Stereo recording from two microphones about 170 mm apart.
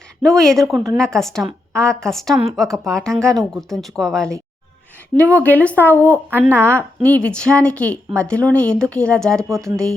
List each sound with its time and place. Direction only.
0.2 s speech: 5° left (ahead or behind)
6.3 s speech: 10° right (ahead or behind)
6.7 s speech: 10° left (ahead or behind)